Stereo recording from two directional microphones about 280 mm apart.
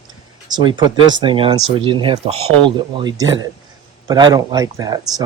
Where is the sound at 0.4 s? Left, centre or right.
Centre.